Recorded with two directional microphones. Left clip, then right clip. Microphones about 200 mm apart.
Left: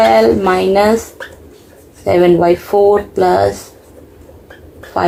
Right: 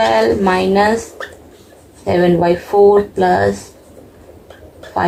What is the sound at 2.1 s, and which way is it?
Speech, 40° left (ahead or behind).